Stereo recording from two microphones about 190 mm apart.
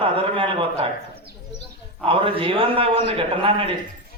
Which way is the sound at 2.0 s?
30° right (ahead or behind).